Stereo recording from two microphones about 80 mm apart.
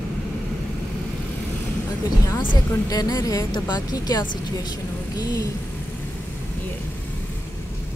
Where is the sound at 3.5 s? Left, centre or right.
Left.